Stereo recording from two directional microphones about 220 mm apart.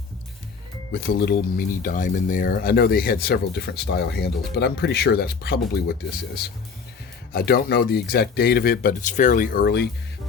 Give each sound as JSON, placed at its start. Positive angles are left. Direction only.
{"t": 0.9, "sound": "speech", "side_deg": 45}